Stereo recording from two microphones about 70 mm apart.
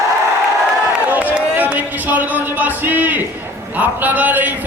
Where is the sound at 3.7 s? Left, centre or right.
Right.